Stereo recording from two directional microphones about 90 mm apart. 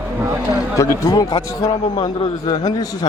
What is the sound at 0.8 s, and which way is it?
Speech, 35° left (ahead or behind).